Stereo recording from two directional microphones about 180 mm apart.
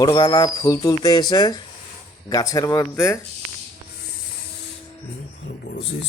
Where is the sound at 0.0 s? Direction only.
25° left (ahead or behind).